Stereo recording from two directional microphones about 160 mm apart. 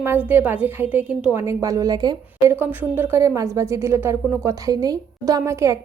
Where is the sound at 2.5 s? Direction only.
10° right (ahead or behind).